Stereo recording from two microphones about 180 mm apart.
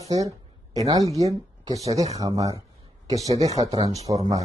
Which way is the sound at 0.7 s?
20° right (ahead or behind).